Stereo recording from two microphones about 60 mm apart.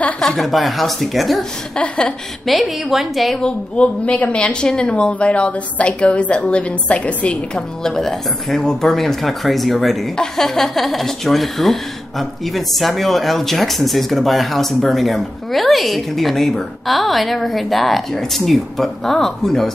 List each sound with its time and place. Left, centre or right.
0.4 s speech: centre
1.8 s a woman's voice: centre
2.4 s speech: centre
3.3 s speech: centre
7.5 s speech: centre